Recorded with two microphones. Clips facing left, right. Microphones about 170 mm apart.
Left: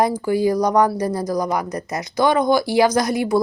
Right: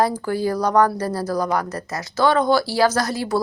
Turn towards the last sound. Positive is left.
turn(degrees=15)  # may be behind; listen again after turning